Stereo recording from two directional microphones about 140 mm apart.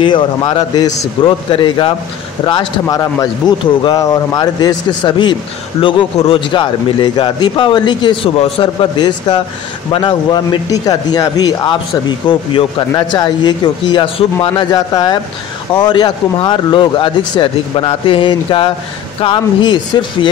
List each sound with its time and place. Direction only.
0.0 s a man's voice: 35° left (ahead or behind)